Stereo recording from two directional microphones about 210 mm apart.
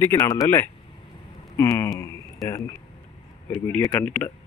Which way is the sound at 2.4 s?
15° left (ahead or behind).